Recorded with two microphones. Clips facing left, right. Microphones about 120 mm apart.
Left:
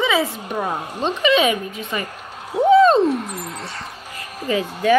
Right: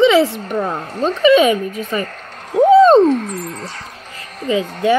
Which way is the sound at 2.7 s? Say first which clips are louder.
Right 4 dB; 35° right (ahead or behind).